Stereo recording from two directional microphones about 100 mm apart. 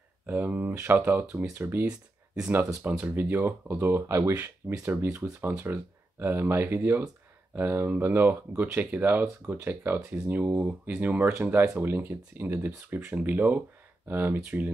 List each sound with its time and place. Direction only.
0.3 s speech: 15° right (ahead or behind)
1.9 s speech: 10° right (ahead or behind)